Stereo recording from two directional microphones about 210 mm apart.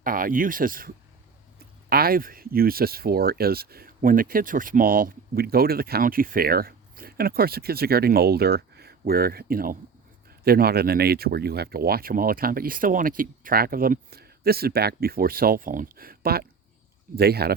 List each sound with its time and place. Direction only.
0.0 s speech: 40° right (ahead or behind)